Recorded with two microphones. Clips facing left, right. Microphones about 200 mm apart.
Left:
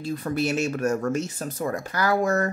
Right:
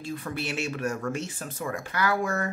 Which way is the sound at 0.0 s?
40° left (ahead or behind).